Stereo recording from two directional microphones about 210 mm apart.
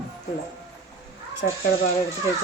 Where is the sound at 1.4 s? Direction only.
45° left (ahead or behind).